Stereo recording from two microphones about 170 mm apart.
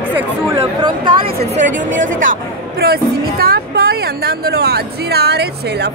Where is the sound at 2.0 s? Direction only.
50° right (ahead or behind).